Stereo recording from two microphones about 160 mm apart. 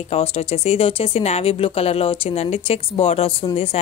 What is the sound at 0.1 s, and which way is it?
A woman's voice, 40° left (ahead or behind).